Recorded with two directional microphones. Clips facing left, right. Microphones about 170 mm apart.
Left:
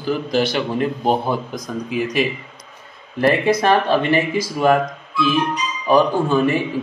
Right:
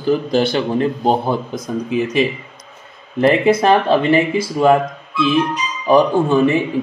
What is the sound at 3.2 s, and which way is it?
Speech, 25° right (ahead or behind).